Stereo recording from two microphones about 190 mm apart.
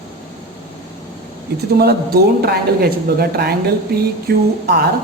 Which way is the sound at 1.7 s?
55° right (ahead or behind).